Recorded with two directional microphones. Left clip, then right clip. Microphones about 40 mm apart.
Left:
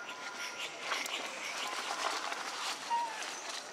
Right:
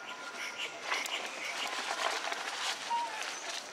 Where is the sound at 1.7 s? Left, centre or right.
Right.